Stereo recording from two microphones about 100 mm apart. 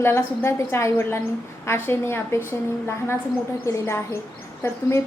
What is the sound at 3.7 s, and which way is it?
A woman's voice, 30° left (ahead or behind).